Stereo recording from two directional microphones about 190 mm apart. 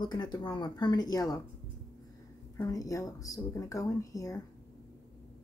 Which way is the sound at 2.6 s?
20° left (ahead or behind).